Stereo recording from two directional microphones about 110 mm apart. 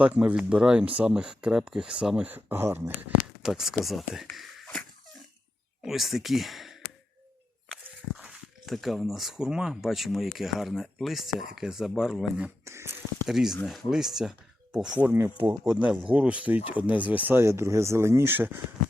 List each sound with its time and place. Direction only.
0.0 s speech: 10° right (ahead or behind)
3.4 s speech: 5° right (ahead or behind)
4.4 s a sound: centre (ahead or behind)
5.8 s speech: centre (ahead or behind)
8.1 s speech: 5° right (ahead or behind)
12.6 s speech: 25° right (ahead or behind)
13.2 s speech: 5° right (ahead or behind); by 15.5 s 20° right (ahead or behind)
15.6 s speech: 5° right (ahead or behind)